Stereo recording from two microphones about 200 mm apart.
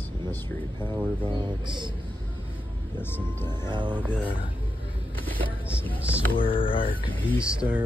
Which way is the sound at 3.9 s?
5° right (ahead or behind).